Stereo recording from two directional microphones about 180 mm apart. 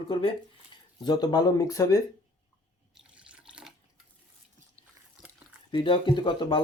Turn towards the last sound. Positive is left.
turn(degrees=25)  # may be behind; listen again after turning